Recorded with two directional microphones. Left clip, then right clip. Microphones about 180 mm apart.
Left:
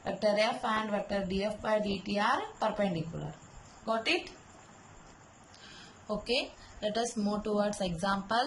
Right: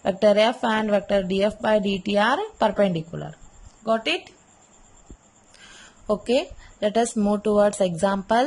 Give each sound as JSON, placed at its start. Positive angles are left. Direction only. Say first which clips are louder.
{"t": 0.0, "sound": "a woman's voice", "louder": "right 11 dB", "side_deg": -55}
{"t": 5.5, "sound": "a sound", "louder": "right 6 dB", "side_deg": -40}
{"t": 7.2, "sound": "speech", "louder": "right 12 dB", "side_deg": -45}